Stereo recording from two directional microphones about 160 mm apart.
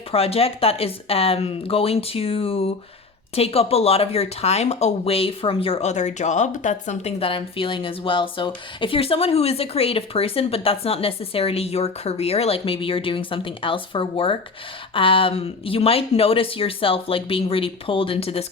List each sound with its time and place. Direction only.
0.1 s speech: 40° left (ahead or behind)